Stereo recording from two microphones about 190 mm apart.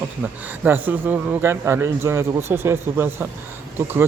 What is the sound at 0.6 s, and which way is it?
A man's voice, 10° right (ahead or behind).